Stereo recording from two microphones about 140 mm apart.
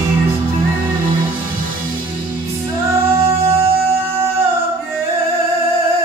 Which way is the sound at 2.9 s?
20° right (ahead or behind).